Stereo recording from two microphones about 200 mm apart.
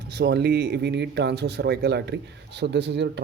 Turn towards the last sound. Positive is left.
turn(degrees=-60)  # may be behind; listen again after turning